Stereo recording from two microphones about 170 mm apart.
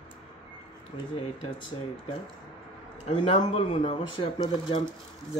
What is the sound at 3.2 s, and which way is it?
Speech, 35° left (ahead or behind).